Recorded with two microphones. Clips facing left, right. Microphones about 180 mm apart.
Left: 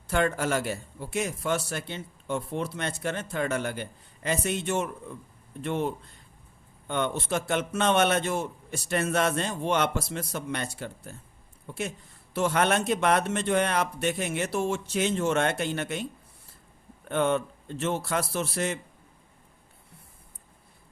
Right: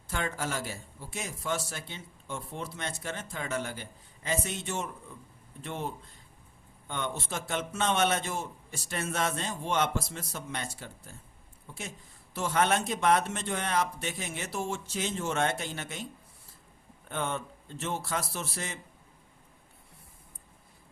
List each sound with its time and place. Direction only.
0.1 s a man's voice: 60° left (ahead or behind)
17.1 s a man's voice: 70° left (ahead or behind)